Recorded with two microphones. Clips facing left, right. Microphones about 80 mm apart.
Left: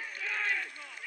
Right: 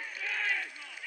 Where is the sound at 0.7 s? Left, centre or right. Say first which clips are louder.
Left 1 dB; left.